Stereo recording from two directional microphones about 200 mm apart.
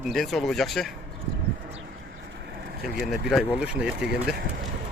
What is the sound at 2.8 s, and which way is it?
Speech, centre (ahead or behind).